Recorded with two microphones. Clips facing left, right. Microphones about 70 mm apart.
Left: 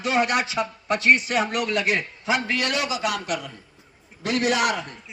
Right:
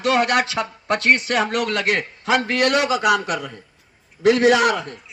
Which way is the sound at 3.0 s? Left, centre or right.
Right.